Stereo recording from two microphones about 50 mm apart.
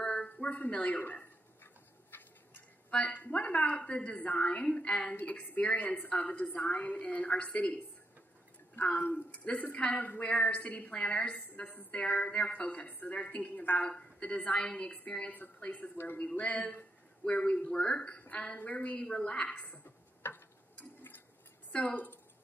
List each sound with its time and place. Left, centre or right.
0.0 s a sound: centre
0.5 s a woman's voice: left
1.6 s a sound: left
2.9 s a woman's voice: left
5.1 s a woman's voice: left
8.8 s speech: left
9.1 s a woman's voice: left
18.9 s a woman's voice: left
20.2 s tick-tock: left